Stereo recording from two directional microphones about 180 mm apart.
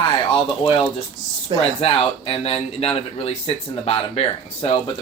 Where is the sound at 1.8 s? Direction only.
30° left (ahead or behind).